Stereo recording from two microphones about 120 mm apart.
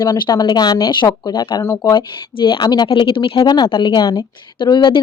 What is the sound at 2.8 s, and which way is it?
Speech, 50° left (ahead or behind).